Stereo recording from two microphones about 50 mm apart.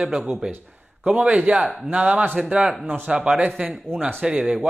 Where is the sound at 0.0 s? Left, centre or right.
Centre.